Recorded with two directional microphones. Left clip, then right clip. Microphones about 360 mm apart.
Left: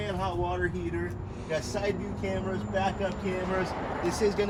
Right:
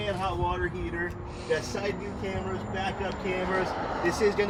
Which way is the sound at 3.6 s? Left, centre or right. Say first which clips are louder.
Right 2 dB; right.